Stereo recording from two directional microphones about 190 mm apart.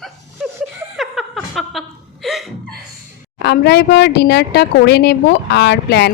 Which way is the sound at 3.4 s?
60° left (ahead or behind).